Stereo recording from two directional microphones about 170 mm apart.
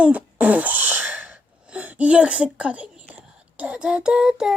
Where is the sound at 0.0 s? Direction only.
10° right (ahead or behind).